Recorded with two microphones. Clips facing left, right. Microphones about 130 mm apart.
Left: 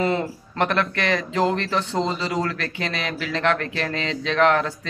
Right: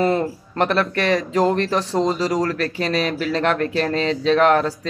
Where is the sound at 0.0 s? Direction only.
40° right (ahead or behind).